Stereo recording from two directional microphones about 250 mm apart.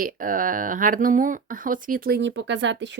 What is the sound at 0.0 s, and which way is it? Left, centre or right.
Speech, right.